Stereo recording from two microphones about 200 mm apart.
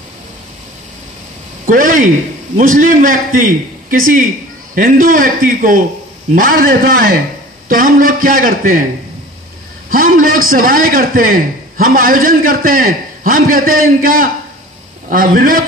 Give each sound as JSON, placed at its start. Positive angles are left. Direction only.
{"t": 1.7, "sound": "a man's voice", "side_deg": -40}
{"t": 9.8, "sound": "a man's voice", "side_deg": -45}